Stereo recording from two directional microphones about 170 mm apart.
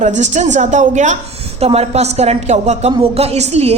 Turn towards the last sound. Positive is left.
turn(degrees=-40)  # may be behind; listen again after turning